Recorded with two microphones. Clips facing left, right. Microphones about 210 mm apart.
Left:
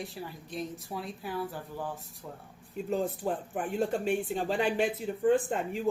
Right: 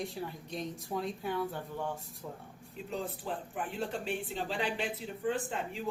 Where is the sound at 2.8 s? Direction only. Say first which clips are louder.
Left 7 dB; 45° left (ahead or behind).